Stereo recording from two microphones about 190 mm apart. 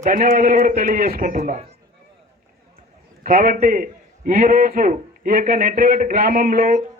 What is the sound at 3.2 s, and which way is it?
A man's voice, 45° right (ahead or behind).